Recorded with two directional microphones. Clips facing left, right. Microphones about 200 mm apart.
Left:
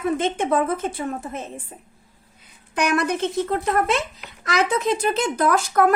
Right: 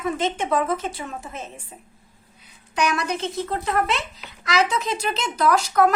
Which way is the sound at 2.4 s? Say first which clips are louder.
Even; 55° left (ahead or behind).